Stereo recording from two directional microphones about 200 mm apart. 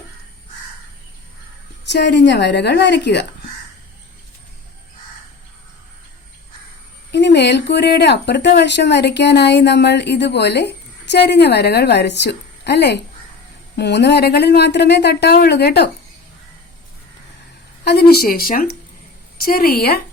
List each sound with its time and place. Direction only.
1.8 s speech: 60° left (ahead or behind)
7.1 s speech: 60° left (ahead or behind)
17.8 s speech: 50° left (ahead or behind)